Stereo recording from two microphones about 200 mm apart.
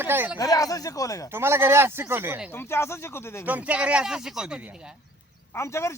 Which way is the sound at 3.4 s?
5° right (ahead or behind).